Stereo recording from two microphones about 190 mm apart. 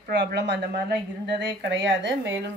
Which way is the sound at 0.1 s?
65° right (ahead or behind).